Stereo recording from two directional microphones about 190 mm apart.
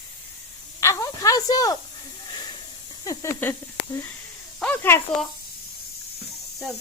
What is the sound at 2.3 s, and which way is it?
Hiss, 25° left (ahead or behind).